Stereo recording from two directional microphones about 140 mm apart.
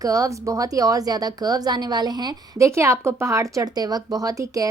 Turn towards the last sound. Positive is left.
turn(degrees=-25)  # may be behind; listen again after turning